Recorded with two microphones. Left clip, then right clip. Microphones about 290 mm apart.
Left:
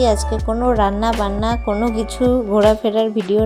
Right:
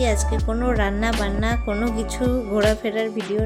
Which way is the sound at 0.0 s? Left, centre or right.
Centre.